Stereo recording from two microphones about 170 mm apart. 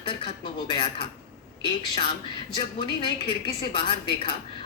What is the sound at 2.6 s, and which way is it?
A woman's voice, 30° left (ahead or behind).